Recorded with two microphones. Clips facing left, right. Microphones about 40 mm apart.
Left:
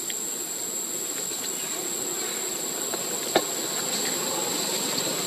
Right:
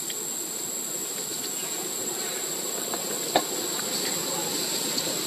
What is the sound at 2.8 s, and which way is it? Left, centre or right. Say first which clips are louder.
Insect: even; centre.